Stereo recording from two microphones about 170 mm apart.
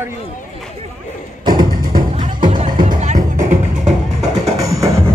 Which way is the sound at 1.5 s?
25° right (ahead or behind).